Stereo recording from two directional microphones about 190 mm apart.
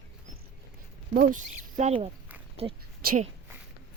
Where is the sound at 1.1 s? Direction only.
40° right (ahead or behind).